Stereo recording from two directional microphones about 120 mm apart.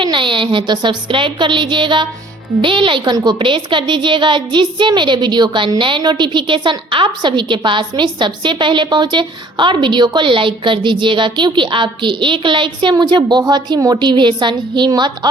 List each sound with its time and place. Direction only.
0.0 s a woman's voice: 45° right (ahead or behind)